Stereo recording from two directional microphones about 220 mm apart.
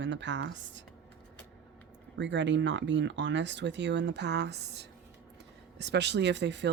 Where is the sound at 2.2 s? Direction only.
55° right (ahead or behind).